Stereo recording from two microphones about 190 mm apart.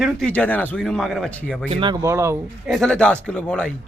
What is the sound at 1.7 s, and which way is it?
Speech, 25° right (ahead or behind).